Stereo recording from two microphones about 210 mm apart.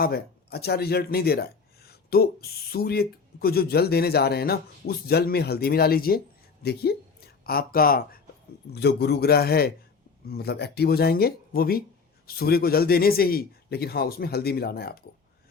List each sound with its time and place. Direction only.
0.0 s a man's voice: 50° left (ahead or behind)